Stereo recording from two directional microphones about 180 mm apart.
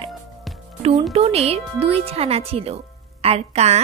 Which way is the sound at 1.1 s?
35° right (ahead or behind).